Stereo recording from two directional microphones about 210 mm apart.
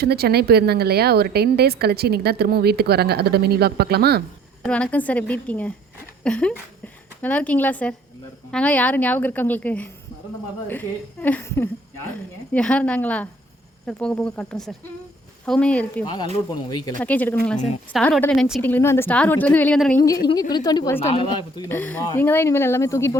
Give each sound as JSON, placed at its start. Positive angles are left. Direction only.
{"t": 0.0, "sound": "speech", "side_deg": -50}
{"t": 4.6, "sound": "speech", "side_deg": 5}
{"t": 20.1, "sound": "speech", "side_deg": 15}